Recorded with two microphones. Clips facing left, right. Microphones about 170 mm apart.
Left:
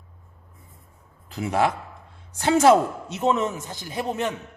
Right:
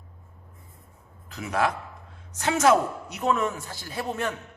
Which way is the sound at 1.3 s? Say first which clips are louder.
Left 3 dB; 30° left (ahead or behind).